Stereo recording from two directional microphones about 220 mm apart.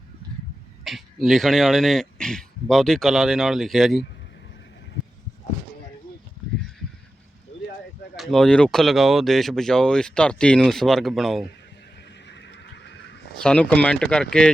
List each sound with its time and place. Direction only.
0.9 s speech: centre (ahead or behind)
8.1 s speech: centre (ahead or behind)
12.3 s a sound: 55° left (ahead or behind)
13.4 s speech: 5° left (ahead or behind)